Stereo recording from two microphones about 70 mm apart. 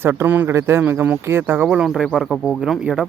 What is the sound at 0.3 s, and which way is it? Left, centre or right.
Speech, right.